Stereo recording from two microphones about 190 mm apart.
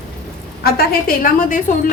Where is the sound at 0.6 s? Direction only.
50° left (ahead or behind).